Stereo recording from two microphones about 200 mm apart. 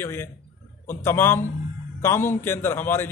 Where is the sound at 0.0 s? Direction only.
10° left (ahead or behind).